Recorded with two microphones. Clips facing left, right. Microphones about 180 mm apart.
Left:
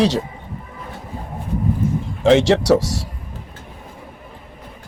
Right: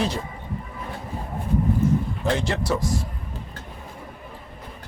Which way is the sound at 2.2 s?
85° left.